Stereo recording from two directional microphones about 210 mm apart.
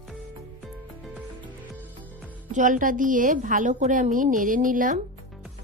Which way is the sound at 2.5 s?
35° right (ahead or behind).